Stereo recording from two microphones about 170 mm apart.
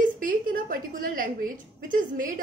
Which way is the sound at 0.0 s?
50° right (ahead or behind).